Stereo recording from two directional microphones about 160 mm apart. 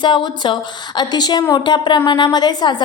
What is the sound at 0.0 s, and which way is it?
A woman's voice, 30° left (ahead or behind).